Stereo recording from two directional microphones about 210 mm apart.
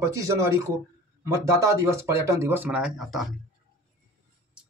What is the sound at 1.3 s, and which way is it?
Speech, 15° right (ahead or behind).